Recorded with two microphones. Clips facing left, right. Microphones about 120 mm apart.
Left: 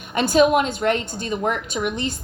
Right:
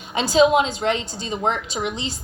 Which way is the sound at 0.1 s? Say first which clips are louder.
Even; 55° left (ahead or behind).